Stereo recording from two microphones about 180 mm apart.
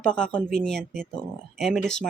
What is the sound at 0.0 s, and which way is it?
Speech, 5° left (ahead or behind).